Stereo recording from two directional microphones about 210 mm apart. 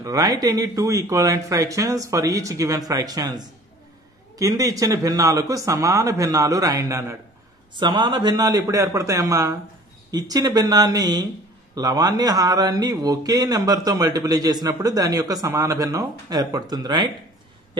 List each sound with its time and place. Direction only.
0.0 s speech: 15° right (ahead or behind)